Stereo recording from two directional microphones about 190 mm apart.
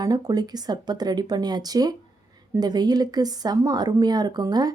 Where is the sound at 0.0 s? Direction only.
20° right (ahead or behind).